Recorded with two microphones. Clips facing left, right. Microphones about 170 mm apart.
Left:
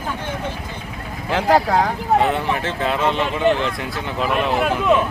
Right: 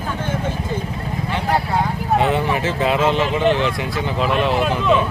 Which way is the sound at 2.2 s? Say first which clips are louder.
Right 1 dB; centre (ahead or behind).